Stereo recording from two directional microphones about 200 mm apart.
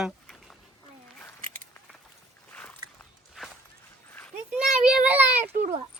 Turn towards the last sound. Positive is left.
turn(degrees=-35)  # may be behind; listen again after turning